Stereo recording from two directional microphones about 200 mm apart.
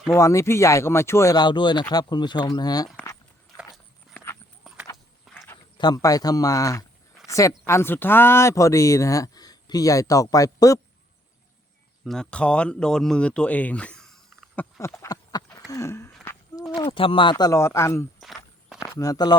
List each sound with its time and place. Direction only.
0.1 s speech: 15° left (ahead or behind)
3.7 s a sound: 10° left (ahead or behind)
5.2 s horse: centre (ahead or behind)
5.7 s a woman's voice: 20° left (ahead or behind)
12.0 s speech: 5° left (ahead or behind); by 15.4 s 20° left (ahead or behind)
15.5 s a sound: 15° left (ahead or behind)
16.9 s speech: 25° left (ahead or behind)
18.2 s walk: centre (ahead or behind)
18.8 s speech: 15° left (ahead or behind)